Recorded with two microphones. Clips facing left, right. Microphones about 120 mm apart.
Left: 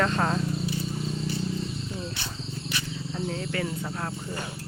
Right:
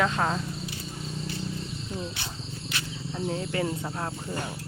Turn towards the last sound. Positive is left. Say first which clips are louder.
# right 1 dB
turn(degrees=-20)  # may be behind; listen again after turning